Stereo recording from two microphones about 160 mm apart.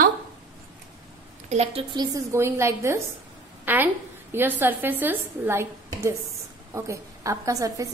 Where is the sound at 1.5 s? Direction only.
40° right (ahead or behind).